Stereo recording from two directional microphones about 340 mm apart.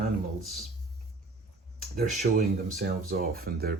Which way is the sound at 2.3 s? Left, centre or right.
Right.